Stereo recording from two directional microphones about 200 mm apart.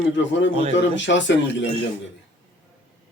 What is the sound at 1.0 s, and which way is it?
Speech, 65° left (ahead or behind).